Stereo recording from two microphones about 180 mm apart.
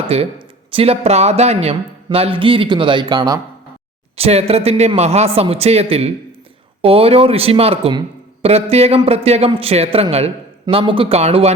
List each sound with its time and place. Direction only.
0.1 s a man's voice: 30° right (ahead or behind)
4.2 s speech: 35° right (ahead or behind)